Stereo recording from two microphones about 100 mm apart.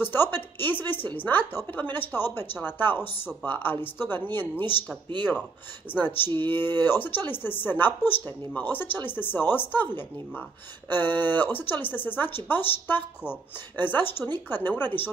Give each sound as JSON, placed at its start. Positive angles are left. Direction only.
{"t": 0.0, "sound": "speech", "side_deg": 20}
{"t": 5.9, "sound": "speech", "side_deg": 20}